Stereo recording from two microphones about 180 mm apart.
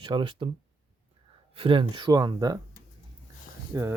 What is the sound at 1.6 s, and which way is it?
Speech, 30° right (ahead or behind).